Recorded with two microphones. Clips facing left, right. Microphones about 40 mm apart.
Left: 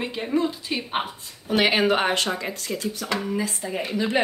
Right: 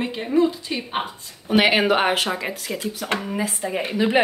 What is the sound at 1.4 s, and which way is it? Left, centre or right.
A woman's voice, centre.